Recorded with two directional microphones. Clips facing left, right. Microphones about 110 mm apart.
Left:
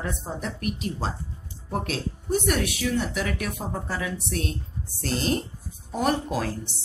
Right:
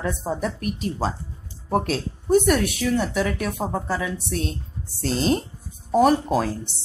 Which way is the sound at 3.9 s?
25° right (ahead or behind).